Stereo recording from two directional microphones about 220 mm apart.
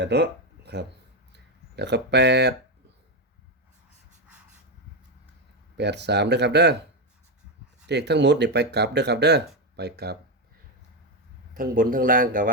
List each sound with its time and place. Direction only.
0.0 s speech: 50° right (ahead or behind)
5.7 s speech: 50° right (ahead or behind)
7.9 s speech: 50° right (ahead or behind)
11.5 s a man's voice: 40° right (ahead or behind)